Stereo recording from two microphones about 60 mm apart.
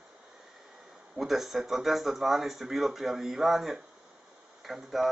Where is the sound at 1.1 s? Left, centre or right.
Centre.